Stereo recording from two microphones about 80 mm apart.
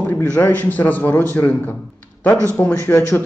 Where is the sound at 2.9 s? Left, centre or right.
Left.